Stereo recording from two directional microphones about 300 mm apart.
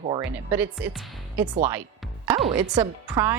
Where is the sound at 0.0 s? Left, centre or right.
Centre.